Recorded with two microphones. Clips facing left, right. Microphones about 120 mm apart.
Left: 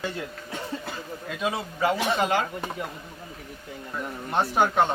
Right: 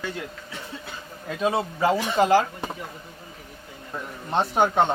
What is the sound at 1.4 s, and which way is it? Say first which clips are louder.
A man's voice: right 4 dB; 30° right (ahead or behind).